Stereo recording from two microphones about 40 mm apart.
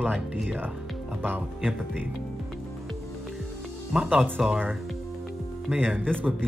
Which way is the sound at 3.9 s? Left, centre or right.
Right.